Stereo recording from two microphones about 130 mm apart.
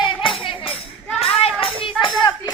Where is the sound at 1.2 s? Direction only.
50° left (ahead or behind).